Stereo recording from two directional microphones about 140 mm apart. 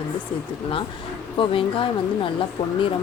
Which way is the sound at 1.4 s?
40° left (ahead or behind).